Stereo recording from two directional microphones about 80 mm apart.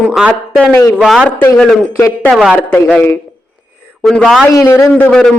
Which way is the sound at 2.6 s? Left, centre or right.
Centre.